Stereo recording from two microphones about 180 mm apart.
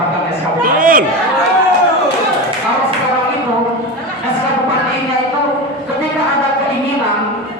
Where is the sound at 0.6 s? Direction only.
50° right (ahead or behind).